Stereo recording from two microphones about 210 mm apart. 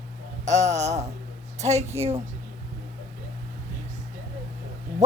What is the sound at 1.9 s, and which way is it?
Speech, 30° right (ahead or behind).